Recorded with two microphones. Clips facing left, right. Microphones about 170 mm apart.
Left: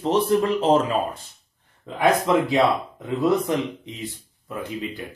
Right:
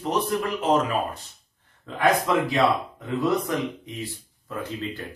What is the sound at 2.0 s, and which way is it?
Speech, 20° left (ahead or behind).